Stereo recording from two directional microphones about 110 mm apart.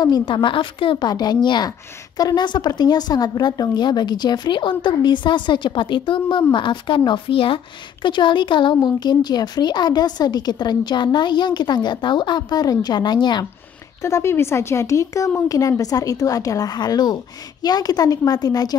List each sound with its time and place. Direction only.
0.0 s a woman's voice: 45° left (ahead or behind)
1.0 s a woman's voice: 40° left (ahead or behind)
14.0 s speech: 25° left (ahead or behind)